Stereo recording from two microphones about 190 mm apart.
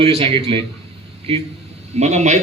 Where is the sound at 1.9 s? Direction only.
35° right (ahead or behind).